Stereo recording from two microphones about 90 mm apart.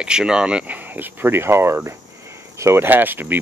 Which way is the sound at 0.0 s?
10° right (ahead or behind).